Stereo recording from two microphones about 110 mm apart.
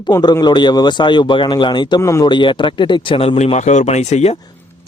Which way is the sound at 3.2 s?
70° left (ahead or behind).